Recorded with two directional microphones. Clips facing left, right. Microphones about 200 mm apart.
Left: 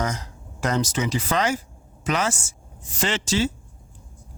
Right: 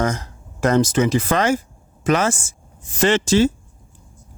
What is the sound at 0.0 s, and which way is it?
Speech, 50° right (ahead or behind).